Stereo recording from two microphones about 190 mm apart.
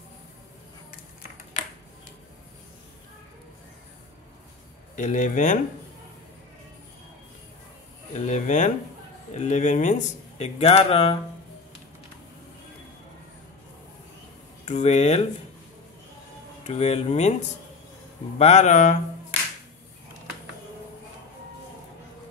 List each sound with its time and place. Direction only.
4.9 s speech: 40° left (ahead or behind)
8.1 s speech: 40° left (ahead or behind)
14.7 s speech: 35° left (ahead or behind)
16.6 s speech: 35° left (ahead or behind)
18.4 s speech: 35° left (ahead or behind)